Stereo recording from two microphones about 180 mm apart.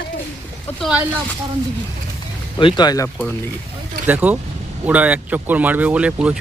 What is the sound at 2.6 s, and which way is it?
Speech, 25° left (ahead or behind).